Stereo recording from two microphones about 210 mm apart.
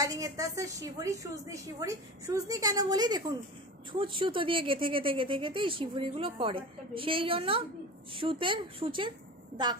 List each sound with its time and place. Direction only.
0.0 s a woman's voice: 15° right (ahead or behind)